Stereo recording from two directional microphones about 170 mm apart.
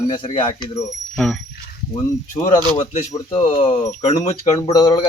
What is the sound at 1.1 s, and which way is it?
Speech, centre (ahead or behind).